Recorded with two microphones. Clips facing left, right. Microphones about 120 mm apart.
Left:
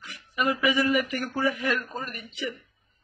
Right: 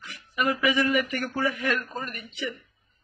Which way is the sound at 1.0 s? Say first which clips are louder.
Left 1 dB; 10° left (ahead or behind).